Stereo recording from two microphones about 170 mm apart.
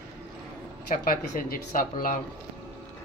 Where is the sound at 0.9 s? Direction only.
55° left (ahead or behind).